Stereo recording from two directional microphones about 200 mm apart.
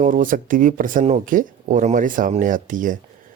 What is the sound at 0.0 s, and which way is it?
Speech, 40° right (ahead or behind).